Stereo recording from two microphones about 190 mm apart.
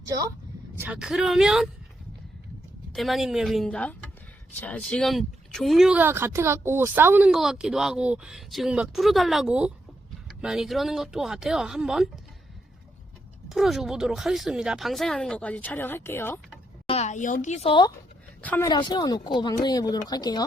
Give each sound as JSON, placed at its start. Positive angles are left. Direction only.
{"t": 0.0, "sound": "speech", "side_deg": -20}
{"t": 0.8, "sound": "speech", "side_deg": -5}
{"t": 2.9, "sound": "speech", "side_deg": 0}
{"t": 13.5, "sound": "speech", "side_deg": 0}
{"t": 16.8, "sound": "a woman's voice", "side_deg": 35}
{"t": 18.4, "sound": "speech", "side_deg": 10}
{"t": 18.7, "sound": "speech", "side_deg": 20}